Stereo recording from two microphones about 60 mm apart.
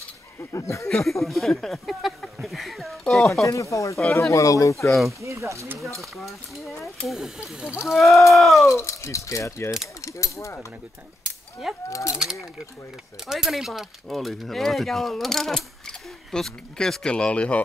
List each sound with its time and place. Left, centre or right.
0.5 s speech: left
0.8 s speech: centre
3.7 s speech: left
4.8 s speech: centre
5.2 s speech: right
7.1 s speech: centre
8.6 s speech: left
11.9 s speech: left
13.3 s speech: centre